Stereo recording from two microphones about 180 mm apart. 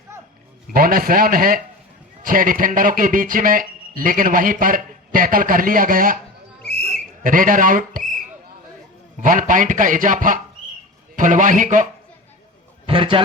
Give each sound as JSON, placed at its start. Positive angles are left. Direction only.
{"t": 0.7, "sound": "speech", "side_deg": -55}
{"t": 6.6, "sound": "whistle", "side_deg": 65}
{"t": 7.2, "sound": "speech", "side_deg": -50}
{"t": 9.2, "sound": "speech", "side_deg": -45}
{"t": 12.8, "sound": "a man's voice", "side_deg": -30}